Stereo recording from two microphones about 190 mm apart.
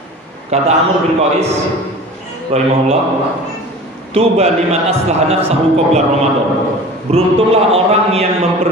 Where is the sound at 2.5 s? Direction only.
35° right (ahead or behind).